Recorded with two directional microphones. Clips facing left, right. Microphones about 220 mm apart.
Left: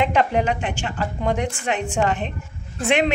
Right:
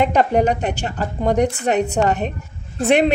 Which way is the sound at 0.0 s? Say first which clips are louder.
Right 4 dB; 45° right (ahead or behind).